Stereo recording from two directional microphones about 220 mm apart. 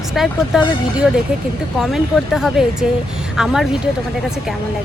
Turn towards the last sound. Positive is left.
turn(degrees=0)  # may be behind; listen again after turning